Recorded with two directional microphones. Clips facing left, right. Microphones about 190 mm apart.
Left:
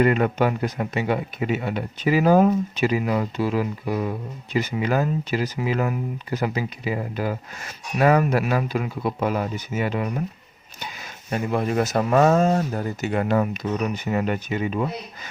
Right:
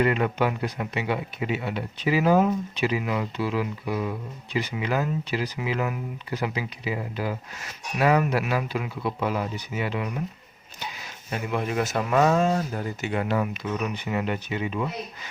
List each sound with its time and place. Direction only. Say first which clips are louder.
0.0 s speech: left 4 dB; 45° left (ahead or behind)
11.3 s speech: left 4 dB; 40° left (ahead or behind)